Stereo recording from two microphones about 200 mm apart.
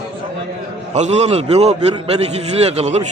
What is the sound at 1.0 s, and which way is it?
A man's voice, 35° right (ahead or behind).